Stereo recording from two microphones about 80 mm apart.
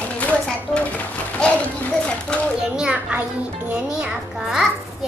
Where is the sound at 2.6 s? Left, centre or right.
Centre.